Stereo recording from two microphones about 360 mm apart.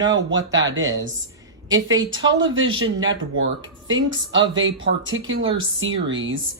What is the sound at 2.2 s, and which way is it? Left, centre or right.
Speech, right.